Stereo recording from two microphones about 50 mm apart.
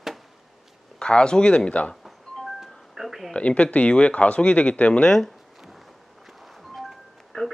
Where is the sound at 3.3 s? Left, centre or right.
Left.